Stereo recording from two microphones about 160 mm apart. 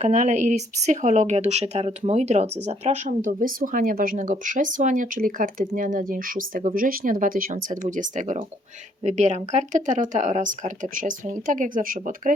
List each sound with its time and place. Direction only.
0.0 s speech: 50° right (ahead or behind)